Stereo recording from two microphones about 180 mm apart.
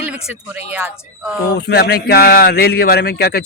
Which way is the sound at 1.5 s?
65° left (ahead or behind).